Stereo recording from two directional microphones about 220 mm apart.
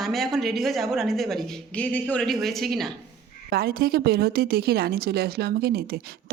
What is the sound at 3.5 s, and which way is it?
A woman's voice, 45° right (ahead or behind).